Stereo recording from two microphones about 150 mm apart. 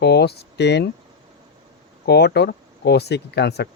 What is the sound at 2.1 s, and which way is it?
Speech, 90° left.